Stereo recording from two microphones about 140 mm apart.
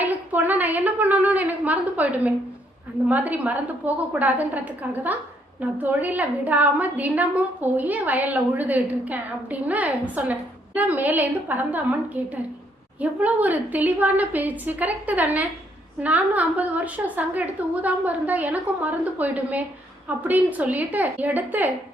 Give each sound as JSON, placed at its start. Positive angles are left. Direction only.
{"t": 0.0, "sound": "a woman's voice", "side_deg": -10}